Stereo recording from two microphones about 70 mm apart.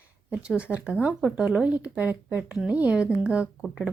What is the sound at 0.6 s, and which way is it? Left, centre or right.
Speech, centre.